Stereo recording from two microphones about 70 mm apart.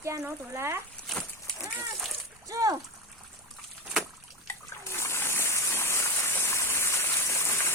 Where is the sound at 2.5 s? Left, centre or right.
Right.